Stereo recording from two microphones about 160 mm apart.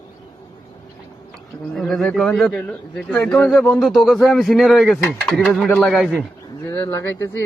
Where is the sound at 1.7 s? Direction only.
Centre (ahead or behind).